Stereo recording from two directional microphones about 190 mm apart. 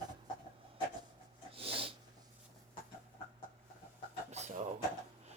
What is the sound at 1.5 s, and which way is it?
Snort, 30° right (ahead or behind).